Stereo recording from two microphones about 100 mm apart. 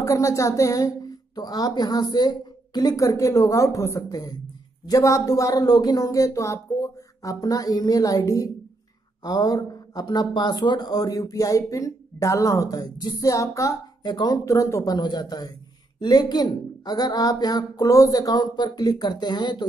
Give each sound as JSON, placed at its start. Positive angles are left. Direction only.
{"t": 0.0, "sound": "speech", "side_deg": 30}
{"t": 14.4, "sound": "speech", "side_deg": 30}